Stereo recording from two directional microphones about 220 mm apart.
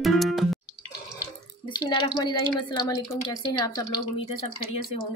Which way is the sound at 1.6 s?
20° left (ahead or behind).